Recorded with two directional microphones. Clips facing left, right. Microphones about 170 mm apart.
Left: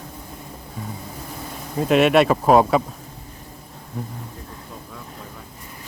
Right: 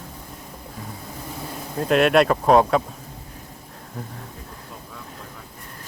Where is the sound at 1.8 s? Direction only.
5° left (ahead or behind).